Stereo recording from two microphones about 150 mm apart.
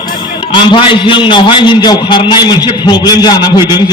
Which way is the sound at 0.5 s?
35° left (ahead or behind).